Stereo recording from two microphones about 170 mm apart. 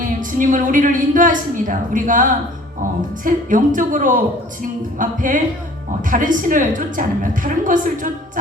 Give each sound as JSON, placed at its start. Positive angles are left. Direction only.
{"t": 0.0, "sound": "a woman's voice", "side_deg": -50}
{"t": 3.2, "sound": "a woman's voice", "side_deg": -50}